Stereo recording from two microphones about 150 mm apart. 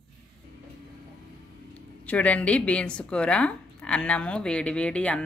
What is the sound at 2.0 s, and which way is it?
Speech, 10° left (ahead or behind).